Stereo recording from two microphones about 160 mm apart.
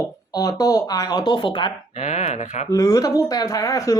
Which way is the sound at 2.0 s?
45° left (ahead or behind).